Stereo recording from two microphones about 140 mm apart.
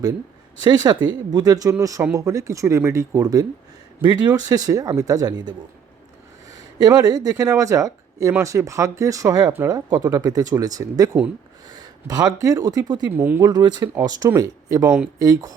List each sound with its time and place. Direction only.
0.6 s speech: 30° right (ahead or behind)
13.1 s speech: 10° right (ahead or behind)
13.4 s speech: 30° right (ahead or behind)